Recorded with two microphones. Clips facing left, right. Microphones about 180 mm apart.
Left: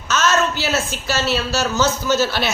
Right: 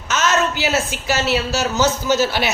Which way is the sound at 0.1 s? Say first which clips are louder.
Even; 15° right (ahead or behind).